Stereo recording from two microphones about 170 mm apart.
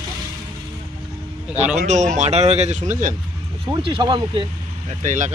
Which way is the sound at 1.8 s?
45° right (ahead or behind).